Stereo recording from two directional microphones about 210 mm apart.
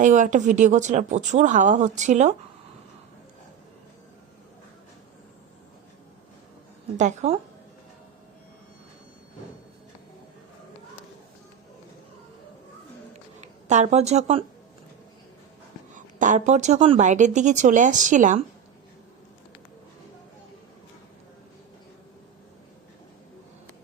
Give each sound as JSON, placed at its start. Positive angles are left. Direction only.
{"t": 0.0, "sound": "speech", "side_deg": -35}
{"t": 6.9, "sound": "speech", "side_deg": -35}
{"t": 13.4, "sound": "a woman's voice", "side_deg": -35}
{"t": 16.0, "sound": "speech", "side_deg": -35}